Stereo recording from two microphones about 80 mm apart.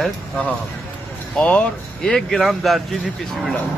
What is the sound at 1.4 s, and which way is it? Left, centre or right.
Speech, centre.